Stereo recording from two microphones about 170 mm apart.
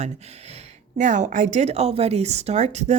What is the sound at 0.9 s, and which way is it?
A woman's voice, 45° right (ahead or behind).